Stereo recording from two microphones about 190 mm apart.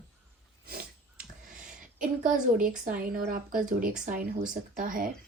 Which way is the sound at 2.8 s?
45° right (ahead or behind).